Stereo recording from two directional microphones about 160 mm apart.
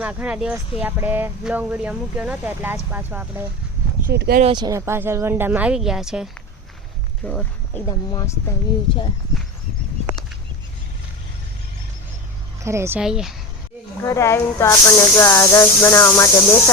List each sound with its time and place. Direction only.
0.0 s speech: 10° right (ahead or behind)
4.0 s speech: 80° right
4.4 s speech: 25° right (ahead or behind); by 6.2 s 5° right (ahead or behind)
7.2 s speech: 10° left (ahead or behind)
7.9 s speech: 25° left (ahead or behind)
12.6 s speech: 15° right (ahead or behind)
13.0 s speech: 5° right (ahead or behind)
14.0 s speech: 15° left (ahead or behind)